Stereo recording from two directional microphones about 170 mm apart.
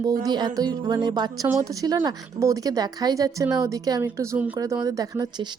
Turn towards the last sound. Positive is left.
turn(degrees=-25)  # may be behind; listen again after turning